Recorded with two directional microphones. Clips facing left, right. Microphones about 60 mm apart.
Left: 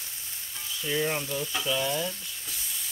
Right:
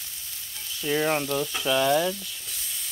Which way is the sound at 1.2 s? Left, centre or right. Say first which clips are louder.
Right 5 dB; right.